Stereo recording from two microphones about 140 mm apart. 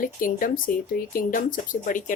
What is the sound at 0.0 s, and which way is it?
Speech, 75° left (ahead or behind).